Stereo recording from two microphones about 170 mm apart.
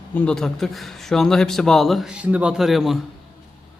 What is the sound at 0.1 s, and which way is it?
A man's voice, 5° left (ahead or behind).